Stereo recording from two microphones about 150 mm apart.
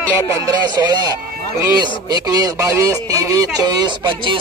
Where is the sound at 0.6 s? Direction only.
30° right (ahead or behind).